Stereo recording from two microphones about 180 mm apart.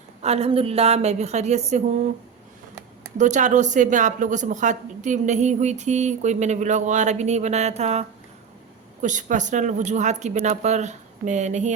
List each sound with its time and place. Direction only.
0.2 s a woman's voice: 35° right (ahead or behind)
3.2 s a woman's voice: 40° right (ahead or behind)